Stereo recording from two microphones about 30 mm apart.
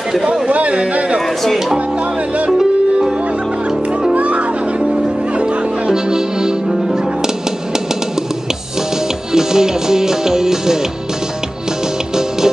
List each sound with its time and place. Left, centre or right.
0.5 s speech: right
4.1 s music: right
5.9 s music: right
9.3 s music: centre